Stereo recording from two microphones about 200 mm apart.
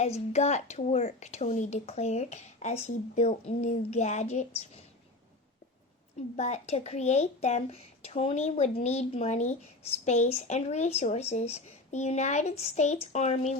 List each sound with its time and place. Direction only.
0.0 s speech: 35° left (ahead or behind)
6.3 s speech: 35° left (ahead or behind)